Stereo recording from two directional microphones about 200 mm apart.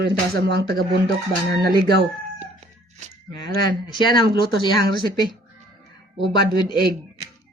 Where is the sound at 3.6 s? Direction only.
20° left (ahead or behind).